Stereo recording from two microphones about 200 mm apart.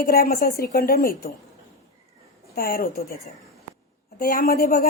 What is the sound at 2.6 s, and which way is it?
Speech, 45° left (ahead or behind).